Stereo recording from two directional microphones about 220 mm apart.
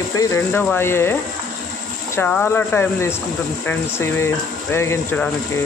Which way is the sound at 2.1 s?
10° left (ahead or behind).